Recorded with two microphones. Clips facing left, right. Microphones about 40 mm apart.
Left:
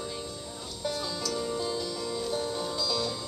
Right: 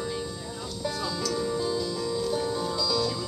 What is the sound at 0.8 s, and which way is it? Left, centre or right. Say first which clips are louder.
Music: right 1 dB; centre.